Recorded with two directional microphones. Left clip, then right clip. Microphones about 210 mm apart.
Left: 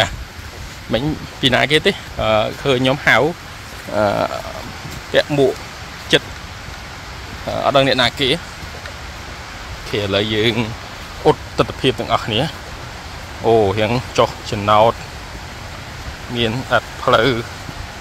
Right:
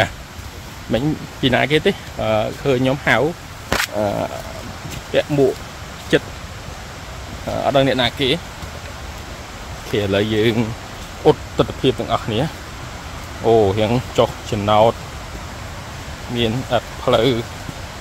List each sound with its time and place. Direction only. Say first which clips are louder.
0.9 s speech: even; 10° right (ahead or behind); by 4.3 s 10° left (ahead or behind)
5.1 s speech: left 2 dB; centre (ahead or behind)
6.1 s vehicle: left 2 dB; 15° right (ahead or behind)
7.5 s speech: left 2 dB; 10° right (ahead or behind)
9.9 s speech: even; 20° right (ahead or behind)
16.3 s speech: left 2 dB; 10° right (ahead or behind)